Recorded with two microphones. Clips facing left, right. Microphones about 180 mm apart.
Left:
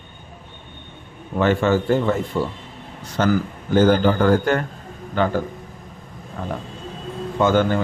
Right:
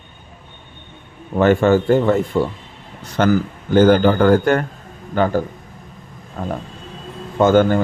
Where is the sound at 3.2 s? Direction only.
65° right (ahead or behind); by 5.3 s 45° right (ahead or behind).